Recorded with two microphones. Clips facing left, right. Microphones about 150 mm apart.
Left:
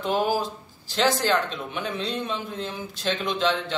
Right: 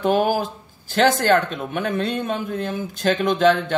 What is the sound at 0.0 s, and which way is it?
A man's voice, 55° right (ahead or behind).